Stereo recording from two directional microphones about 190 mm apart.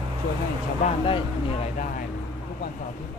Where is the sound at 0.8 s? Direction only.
30° left (ahead or behind).